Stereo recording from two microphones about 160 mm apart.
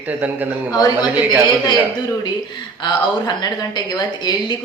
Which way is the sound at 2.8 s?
25° left (ahead or behind).